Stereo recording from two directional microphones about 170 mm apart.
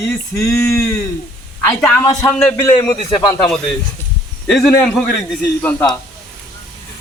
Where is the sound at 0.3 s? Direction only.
15° left (ahead or behind).